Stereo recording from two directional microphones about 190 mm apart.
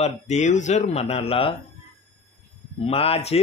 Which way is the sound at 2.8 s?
30° left (ahead or behind).